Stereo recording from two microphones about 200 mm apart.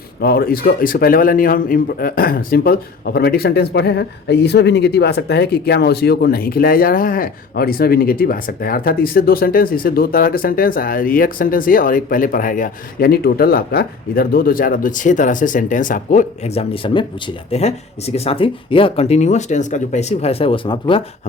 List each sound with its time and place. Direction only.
0.2 s a man's voice: 50° left (ahead or behind); by 21.0 s 25° left (ahead or behind)